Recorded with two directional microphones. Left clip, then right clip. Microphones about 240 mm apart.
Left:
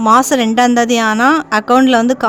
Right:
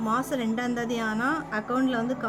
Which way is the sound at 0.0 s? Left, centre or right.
Left.